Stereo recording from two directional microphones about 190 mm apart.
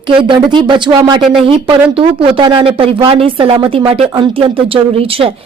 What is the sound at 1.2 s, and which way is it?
Speech, centre (ahead or behind).